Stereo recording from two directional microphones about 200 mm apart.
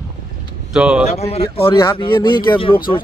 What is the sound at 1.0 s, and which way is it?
Speech, 30° left (ahead or behind).